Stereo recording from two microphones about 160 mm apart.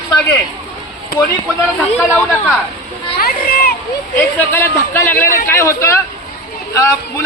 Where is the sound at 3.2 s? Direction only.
65° left (ahead or behind).